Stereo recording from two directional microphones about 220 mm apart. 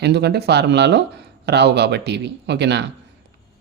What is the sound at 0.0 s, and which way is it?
Speech, 50° right (ahead or behind).